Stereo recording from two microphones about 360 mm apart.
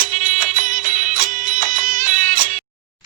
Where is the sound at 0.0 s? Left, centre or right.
Right.